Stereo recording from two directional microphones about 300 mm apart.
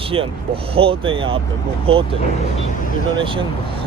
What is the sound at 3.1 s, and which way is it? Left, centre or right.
Speech, centre.